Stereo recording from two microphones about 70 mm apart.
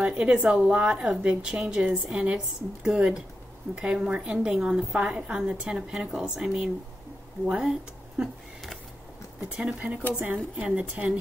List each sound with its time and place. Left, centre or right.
0.0 s a woman's voice: centre
9.6 s a woman's voice: centre